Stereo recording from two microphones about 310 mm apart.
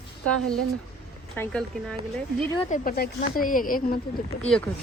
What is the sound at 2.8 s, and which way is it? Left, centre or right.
A woman's voice, left.